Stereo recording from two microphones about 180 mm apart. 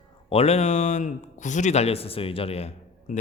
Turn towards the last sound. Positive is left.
turn(degrees=35)  # may be behind; listen again after turning